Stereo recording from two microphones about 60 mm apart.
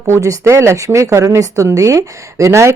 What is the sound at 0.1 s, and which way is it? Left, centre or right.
Speech, right.